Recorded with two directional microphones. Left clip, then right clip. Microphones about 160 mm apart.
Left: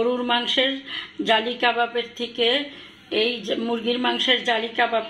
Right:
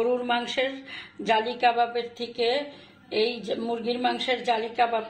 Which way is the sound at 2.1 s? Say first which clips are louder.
Left 5 dB; 40° left (ahead or behind).